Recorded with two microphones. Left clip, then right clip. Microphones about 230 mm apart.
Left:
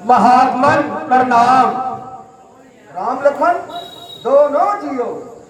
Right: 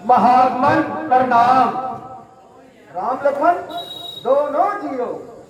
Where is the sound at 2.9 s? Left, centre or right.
Left.